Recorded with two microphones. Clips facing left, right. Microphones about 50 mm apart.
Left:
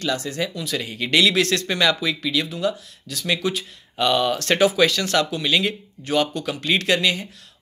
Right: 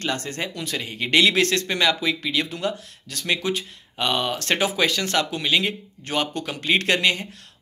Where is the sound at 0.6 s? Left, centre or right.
Right.